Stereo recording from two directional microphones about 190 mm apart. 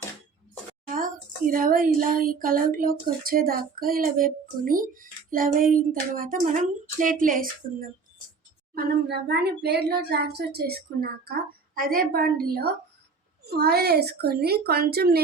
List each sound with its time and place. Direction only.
0.9 s speech: 45° right (ahead or behind)
8.7 s speech: 60° right (ahead or behind)